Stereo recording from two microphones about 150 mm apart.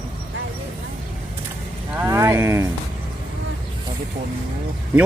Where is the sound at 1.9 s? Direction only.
15° right (ahead or behind).